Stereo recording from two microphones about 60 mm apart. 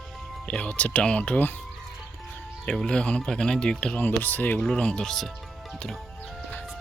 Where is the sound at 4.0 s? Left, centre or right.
Left.